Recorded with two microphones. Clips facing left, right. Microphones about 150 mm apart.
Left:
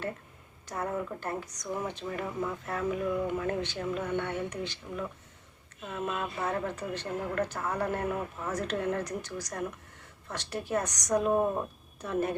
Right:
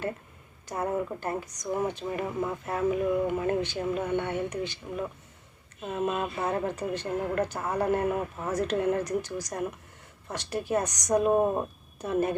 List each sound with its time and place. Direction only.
0.8 s a woman's voice: 25° right (ahead or behind)
5.8 s speech: 25° right (ahead or behind)
7.8 s speech: 25° right (ahead or behind)
8.6 s a woman's voice: 15° right (ahead or behind)